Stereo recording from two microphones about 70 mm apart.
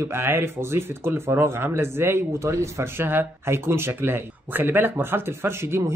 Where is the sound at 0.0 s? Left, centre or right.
Right.